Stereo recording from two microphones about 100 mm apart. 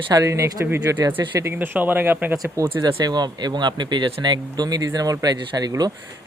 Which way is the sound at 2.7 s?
45° right (ahead or behind).